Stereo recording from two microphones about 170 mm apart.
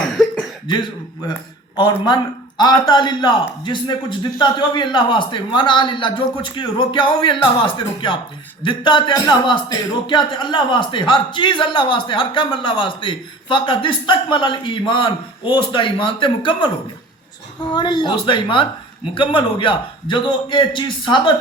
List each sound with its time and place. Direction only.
0.0 s cough: centre (ahead or behind)
0.7 s speech: 25° left (ahead or behind)